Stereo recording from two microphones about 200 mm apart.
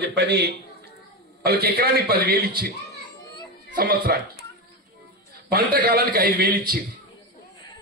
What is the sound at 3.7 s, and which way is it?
Speech, 50° right (ahead or behind).